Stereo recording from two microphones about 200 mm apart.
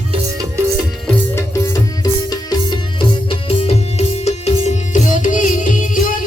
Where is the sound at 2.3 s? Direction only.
20° left (ahead or behind).